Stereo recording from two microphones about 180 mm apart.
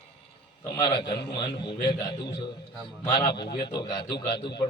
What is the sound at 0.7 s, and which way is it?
A man's voice, 25° left (ahead or behind).